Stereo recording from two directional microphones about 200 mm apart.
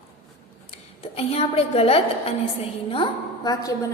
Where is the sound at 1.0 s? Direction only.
30° left (ahead or behind).